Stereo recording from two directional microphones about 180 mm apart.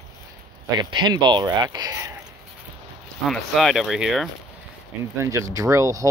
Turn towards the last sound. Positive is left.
turn(degrees=-20)  # may be behind; listen again after turning